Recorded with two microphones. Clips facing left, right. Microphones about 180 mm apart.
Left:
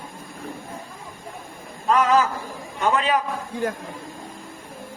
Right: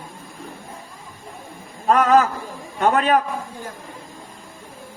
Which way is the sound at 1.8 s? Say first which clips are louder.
Right 3 dB; 50° right (ahead or behind).